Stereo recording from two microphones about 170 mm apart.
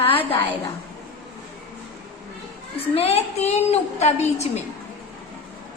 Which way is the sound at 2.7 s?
35° left (ahead or behind).